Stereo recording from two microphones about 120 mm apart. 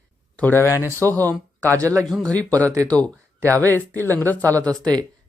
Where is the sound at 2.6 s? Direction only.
25° right (ahead or behind).